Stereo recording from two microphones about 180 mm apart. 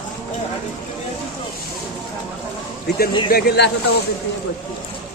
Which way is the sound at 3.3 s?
65° left (ahead or behind).